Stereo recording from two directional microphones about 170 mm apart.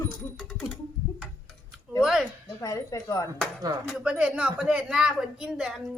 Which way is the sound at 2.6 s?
20° left (ahead or behind).